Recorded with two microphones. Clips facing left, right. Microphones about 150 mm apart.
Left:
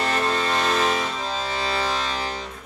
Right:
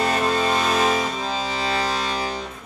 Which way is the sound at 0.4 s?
15° right (ahead or behind).